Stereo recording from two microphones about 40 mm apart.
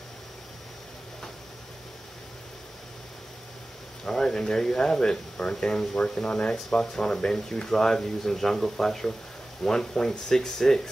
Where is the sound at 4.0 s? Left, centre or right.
Centre.